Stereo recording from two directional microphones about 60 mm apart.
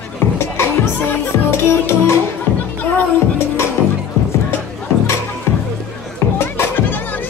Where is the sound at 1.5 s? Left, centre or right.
Left.